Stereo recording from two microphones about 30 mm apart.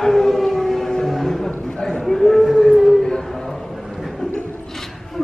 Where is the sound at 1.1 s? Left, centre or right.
Centre.